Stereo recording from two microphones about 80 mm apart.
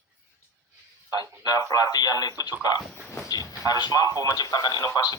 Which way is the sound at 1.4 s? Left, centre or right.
Left.